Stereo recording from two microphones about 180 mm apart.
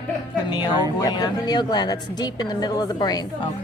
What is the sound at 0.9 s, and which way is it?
A woman's voice, 20° left (ahead or behind).